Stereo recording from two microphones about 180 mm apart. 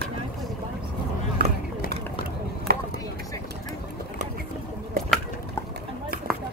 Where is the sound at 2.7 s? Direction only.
55° right (ahead or behind).